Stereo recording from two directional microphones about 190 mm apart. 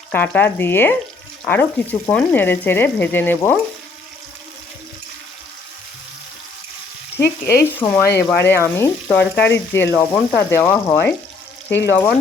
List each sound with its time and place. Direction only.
0.1 s speech: 10° left (ahead or behind)
7.2 s frying: 60° left (ahead or behind)
7.8 s speech: 15° left (ahead or behind)
9.0 s frying: 5° left (ahead or behind)
9.5 s speech: 10° left (ahead or behind)